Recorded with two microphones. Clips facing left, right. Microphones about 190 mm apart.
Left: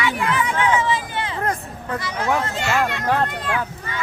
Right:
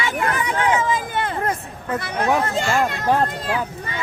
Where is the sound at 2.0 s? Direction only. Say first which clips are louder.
Right 3 dB; 60° right (ahead or behind).